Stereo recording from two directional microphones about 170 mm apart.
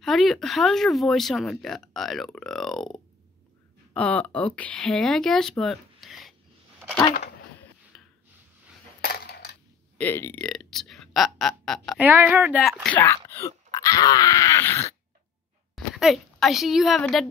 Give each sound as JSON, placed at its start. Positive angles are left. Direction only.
{"t": 0.0, "sound": "speech", "side_deg": 0}
{"t": 7.9, "sound": "snort", "side_deg": 5}
{"t": 9.0, "sound": "coin", "side_deg": 70}
{"t": 9.9, "sound": "speech", "side_deg": 10}
{"t": 12.0, "sound": "speech", "side_deg": -10}
{"t": 15.7, "sound": "a woman's voice", "side_deg": 0}